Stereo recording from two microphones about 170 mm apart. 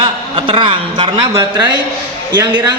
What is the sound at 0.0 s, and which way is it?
A man's voice, 30° right (ahead or behind).